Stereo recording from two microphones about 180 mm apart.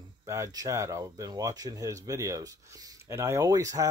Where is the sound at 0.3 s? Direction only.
20° right (ahead or behind).